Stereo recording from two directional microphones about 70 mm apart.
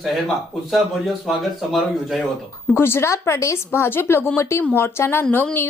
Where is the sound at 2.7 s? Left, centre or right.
Left.